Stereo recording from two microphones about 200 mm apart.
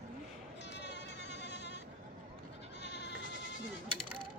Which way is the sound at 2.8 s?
60° left (ahead or behind).